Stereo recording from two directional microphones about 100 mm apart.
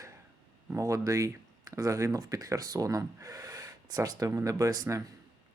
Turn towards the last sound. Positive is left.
turn(degrees=-30)  # may be behind; listen again after turning